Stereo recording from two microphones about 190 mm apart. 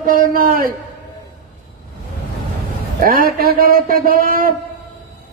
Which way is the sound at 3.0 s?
50° right (ahead or behind).